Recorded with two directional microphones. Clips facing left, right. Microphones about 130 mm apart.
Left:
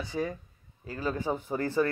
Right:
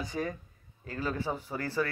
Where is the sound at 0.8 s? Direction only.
15° left (ahead or behind).